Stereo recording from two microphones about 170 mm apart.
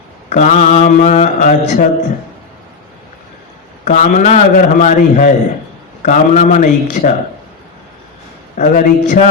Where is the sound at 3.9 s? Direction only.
45° left (ahead or behind).